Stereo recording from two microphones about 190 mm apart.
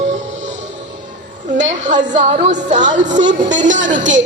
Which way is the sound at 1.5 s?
40° right (ahead or behind).